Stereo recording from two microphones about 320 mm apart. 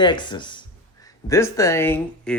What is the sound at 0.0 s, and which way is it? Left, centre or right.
Speech, centre.